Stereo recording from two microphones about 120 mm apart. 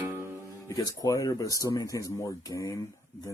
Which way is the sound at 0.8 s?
30° left (ahead or behind).